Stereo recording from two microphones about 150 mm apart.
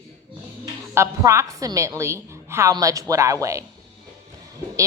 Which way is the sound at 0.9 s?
20° right (ahead or behind).